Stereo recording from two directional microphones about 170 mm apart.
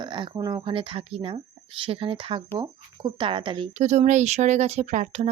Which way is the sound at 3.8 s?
45° right (ahead or behind).